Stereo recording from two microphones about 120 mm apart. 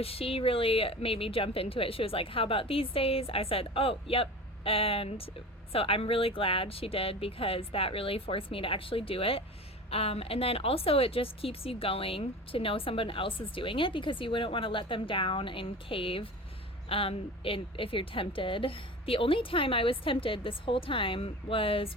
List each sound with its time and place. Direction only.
0.0 s speech: 55° left (ahead or behind)